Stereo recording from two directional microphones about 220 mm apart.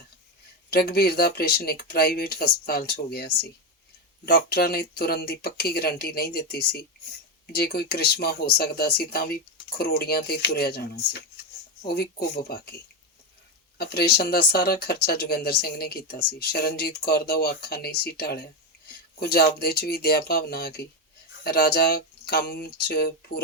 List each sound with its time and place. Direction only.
0.7 s speech: 45° left (ahead or behind)
13.7 s speech: 45° left (ahead or behind)